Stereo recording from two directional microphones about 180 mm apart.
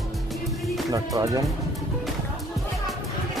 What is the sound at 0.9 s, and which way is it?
Speech, 20° right (ahead or behind).